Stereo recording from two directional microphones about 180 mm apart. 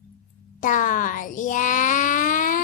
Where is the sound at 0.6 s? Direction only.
45° left (ahead or behind).